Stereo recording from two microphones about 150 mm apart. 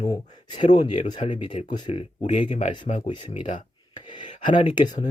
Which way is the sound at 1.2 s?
35° left (ahead or behind).